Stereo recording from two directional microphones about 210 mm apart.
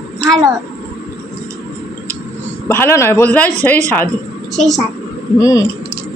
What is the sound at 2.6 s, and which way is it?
A woman's voice, 10° left (ahead or behind).